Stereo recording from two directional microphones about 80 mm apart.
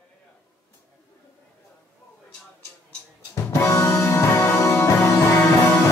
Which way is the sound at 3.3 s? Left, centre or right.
Left.